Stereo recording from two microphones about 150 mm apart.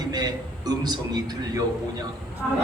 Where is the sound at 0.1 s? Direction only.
25° right (ahead or behind).